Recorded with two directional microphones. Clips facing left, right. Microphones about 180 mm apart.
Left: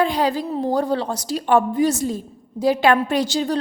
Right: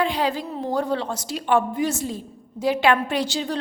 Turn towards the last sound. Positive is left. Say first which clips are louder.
# left 4 dB
turn(degrees=40)  # may be behind; listen again after turning